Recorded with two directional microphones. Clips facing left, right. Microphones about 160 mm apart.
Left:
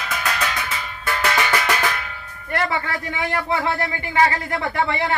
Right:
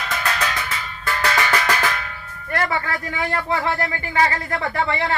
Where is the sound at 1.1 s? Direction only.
15° left (ahead or behind).